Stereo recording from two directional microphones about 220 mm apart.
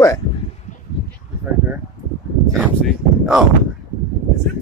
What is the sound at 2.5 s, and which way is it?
Speech, centre (ahead or behind).